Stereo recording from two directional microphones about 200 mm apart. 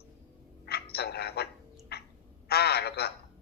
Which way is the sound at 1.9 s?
55° left (ahead or behind).